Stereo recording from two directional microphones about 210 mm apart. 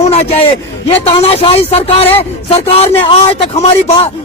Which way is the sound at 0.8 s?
25° left (ahead or behind).